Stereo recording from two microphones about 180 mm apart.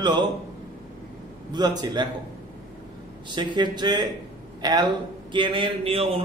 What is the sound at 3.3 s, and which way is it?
A man's voice, 25° right (ahead or behind).